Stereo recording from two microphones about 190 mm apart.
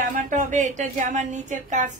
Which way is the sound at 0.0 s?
40° right (ahead or behind).